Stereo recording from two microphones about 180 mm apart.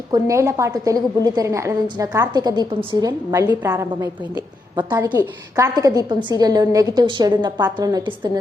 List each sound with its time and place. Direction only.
0.1 s a woman's voice: 15° right (ahead or behind)